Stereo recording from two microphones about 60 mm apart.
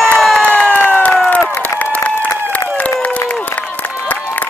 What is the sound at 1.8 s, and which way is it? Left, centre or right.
Applause, left.